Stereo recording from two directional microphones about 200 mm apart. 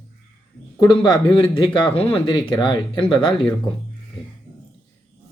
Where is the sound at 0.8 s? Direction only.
20° left (ahead or behind).